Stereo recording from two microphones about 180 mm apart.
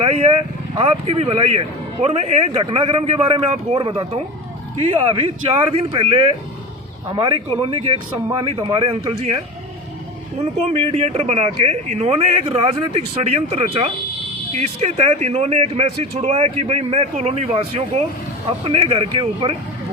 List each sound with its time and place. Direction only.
0.0 s a man's voice: 35° right (ahead or behind)
5.7 s a man's voice: 35° right (ahead or behind)
10.7 s speech: 35° right (ahead or behind)